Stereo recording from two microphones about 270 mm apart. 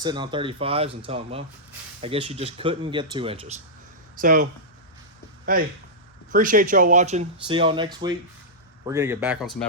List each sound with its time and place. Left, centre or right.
0.0 s speech: centre
5.5 s speech: right; by 9.5 s centre